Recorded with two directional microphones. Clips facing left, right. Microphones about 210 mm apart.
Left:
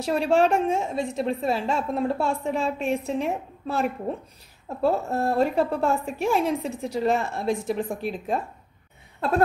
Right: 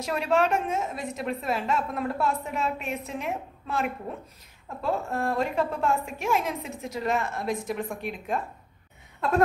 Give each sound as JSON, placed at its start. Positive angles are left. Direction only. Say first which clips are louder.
{"t": 0.0, "sound": "a woman's voice", "louder": "left 4 dB", "side_deg": 30}